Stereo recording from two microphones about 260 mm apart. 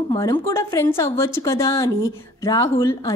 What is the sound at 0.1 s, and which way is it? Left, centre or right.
A woman's voice, centre.